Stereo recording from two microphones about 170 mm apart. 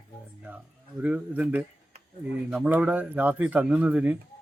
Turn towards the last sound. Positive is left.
turn(degrees=-10)  # may be behind; listen again after turning